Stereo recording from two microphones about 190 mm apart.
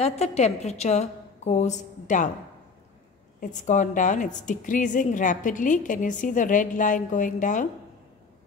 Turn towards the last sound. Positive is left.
turn(degrees=40)  # may be behind; listen again after turning